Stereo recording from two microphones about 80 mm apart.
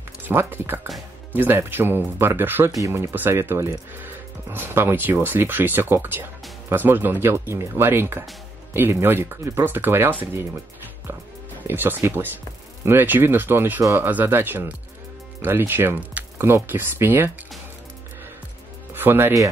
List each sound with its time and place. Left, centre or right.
0.2 s speech: right
11.6 s speech: right
18.9 s speech: right